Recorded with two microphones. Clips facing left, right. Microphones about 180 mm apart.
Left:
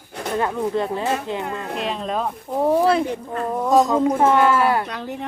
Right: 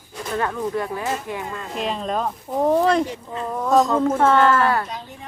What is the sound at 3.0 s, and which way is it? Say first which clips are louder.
Speech: left 4 dB; 55° left (ahead or behind).